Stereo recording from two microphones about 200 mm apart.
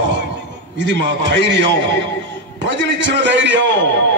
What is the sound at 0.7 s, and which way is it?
A man's voice, 60° right (ahead or behind).